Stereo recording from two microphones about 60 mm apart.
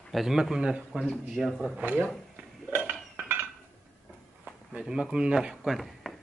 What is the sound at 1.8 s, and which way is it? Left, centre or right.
Speech, right.